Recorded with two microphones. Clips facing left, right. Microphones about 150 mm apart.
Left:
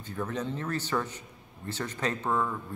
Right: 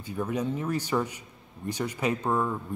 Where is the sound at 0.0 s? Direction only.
10° right (ahead or behind).